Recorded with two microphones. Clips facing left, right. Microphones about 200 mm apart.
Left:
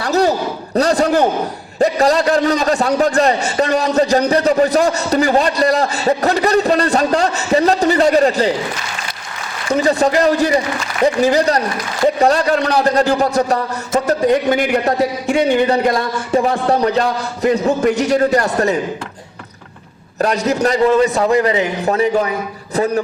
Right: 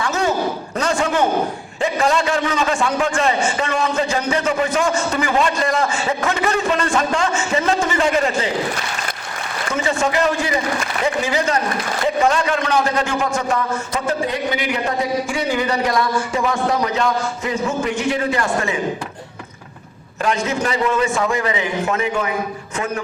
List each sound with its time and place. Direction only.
0.0 s a sound: 35° left (ahead or behind)
1.8 s a man's voice: 40° left (ahead or behind)
9.7 s a man's voice: 35° left (ahead or behind)
15.7 s a man's voice: 30° left (ahead or behind)
20.1 s a man's voice: 40° left (ahead or behind)